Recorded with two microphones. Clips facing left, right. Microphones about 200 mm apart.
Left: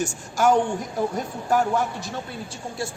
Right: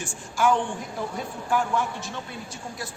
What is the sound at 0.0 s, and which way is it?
Speech, 40° left (ahead or behind).